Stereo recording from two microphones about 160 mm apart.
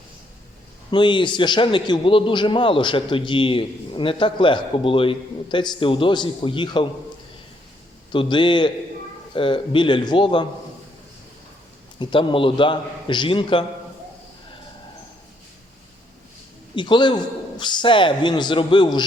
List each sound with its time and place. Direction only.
0.9 s a man's voice: 30° left (ahead or behind)
8.1 s a man's voice: 30° left (ahead or behind)
11.9 s a man's voice: 30° left (ahead or behind)
16.7 s a man's voice: 30° left (ahead or behind)